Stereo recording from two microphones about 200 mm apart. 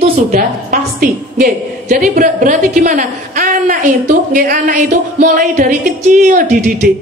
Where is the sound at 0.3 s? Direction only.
45° right (ahead or behind).